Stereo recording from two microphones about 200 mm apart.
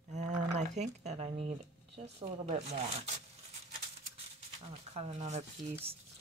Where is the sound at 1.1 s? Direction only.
30° right (ahead or behind).